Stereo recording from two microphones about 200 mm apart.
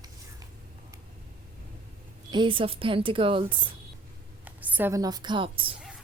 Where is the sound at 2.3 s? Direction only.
25° right (ahead or behind).